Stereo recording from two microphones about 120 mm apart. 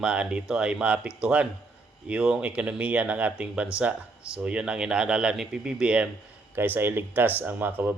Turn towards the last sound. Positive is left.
turn(degrees=-15)  # may be behind; listen again after turning